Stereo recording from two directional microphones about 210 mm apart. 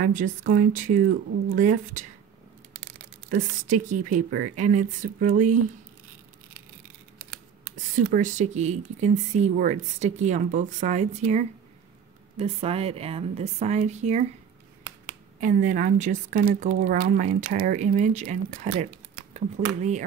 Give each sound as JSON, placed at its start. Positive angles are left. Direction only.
{"t": 0.0, "sound": "speech", "side_deg": -35}
{"t": 3.3, "sound": "speech", "side_deg": -40}
{"t": 7.7, "sound": "a woman's voice", "side_deg": -40}
{"t": 15.4, "sound": "speech", "side_deg": -35}